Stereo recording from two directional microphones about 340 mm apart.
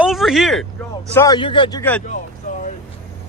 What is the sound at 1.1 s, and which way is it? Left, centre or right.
Speech, centre.